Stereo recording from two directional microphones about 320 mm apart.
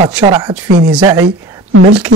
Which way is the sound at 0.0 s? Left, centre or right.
Centre.